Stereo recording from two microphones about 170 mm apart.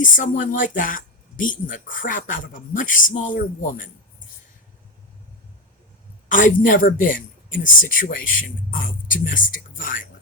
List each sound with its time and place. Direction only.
0.0 s a man's voice: 50° left (ahead or behind)
6.2 s a man's voice: 50° left (ahead or behind)